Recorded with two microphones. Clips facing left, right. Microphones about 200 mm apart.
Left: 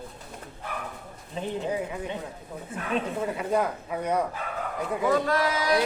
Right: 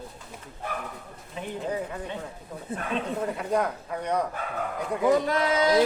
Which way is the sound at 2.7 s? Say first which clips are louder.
Right 4 dB; 35° right (ahead or behind).